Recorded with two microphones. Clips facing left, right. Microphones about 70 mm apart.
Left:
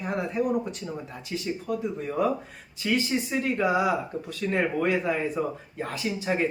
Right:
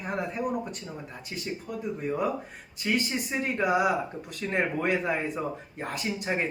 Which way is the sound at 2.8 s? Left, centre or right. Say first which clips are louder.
Left 2 dB; right.